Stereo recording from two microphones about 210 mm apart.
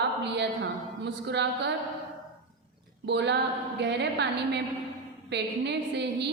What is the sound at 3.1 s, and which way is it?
A woman's voice, 55° right (ahead or behind).